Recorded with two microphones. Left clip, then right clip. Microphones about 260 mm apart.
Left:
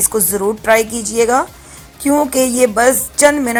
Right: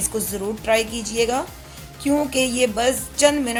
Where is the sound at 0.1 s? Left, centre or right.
Left.